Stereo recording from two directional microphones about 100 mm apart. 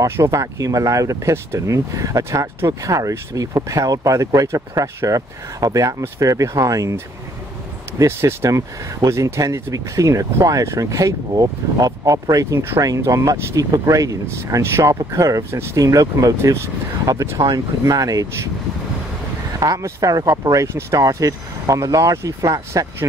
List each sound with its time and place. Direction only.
0.0 s speech: 30° right (ahead or behind)
8.0 s speech: 25° right (ahead or behind)
19.6 s speech: 35° right (ahead or behind)